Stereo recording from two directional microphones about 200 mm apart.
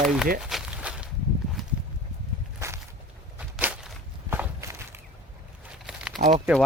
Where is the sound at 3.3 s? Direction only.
5° right (ahead or behind).